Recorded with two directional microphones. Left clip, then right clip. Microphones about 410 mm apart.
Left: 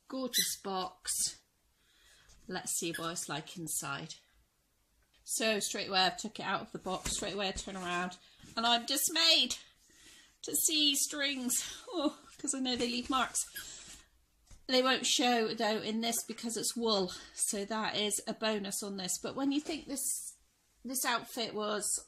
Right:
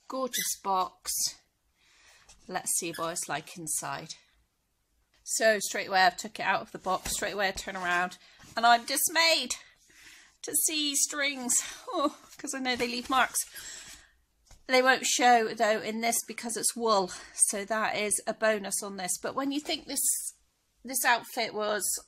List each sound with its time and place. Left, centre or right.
0.1 s speech: centre
2.4 s speech: centre
5.2 s speech: centre
6.6 s speech: right
7.2 s speech: centre
7.8 s speech: right
8.6 s speech: centre
11.8 s a sound: right
14.7 s speech: centre